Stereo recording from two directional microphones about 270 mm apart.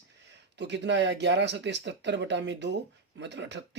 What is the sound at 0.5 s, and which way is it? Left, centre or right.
Speech, right.